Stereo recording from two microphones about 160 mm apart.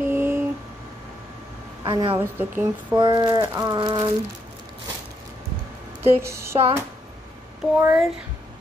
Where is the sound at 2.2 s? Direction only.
15° right (ahead or behind).